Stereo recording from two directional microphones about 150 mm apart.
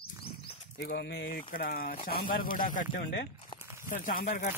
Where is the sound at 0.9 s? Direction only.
80° left.